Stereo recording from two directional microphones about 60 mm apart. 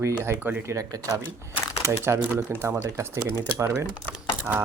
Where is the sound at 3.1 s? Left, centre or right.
Right.